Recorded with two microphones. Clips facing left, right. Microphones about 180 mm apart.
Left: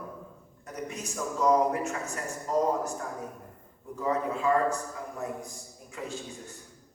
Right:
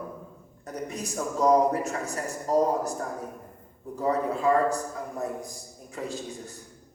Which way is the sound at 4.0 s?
35° right (ahead or behind).